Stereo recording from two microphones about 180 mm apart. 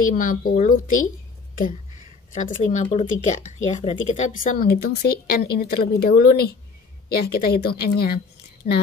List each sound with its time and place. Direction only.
0.0 s speech: 50° left (ahead or behind)
2.3 s speech: 40° left (ahead or behind); by 8.2 s 60° left (ahead or behind)